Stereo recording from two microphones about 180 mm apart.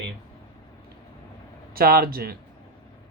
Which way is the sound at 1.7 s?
55° right (ahead or behind).